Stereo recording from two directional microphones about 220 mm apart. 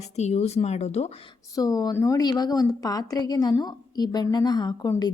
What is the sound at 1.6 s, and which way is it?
A woman's voice, 15° left (ahead or behind).